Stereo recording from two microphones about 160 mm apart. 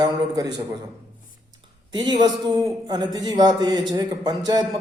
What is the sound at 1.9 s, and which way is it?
A man's voice, 25° right (ahead or behind).